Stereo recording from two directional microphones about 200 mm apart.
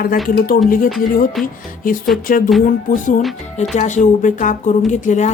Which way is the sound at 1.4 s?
Centre (ahead or behind).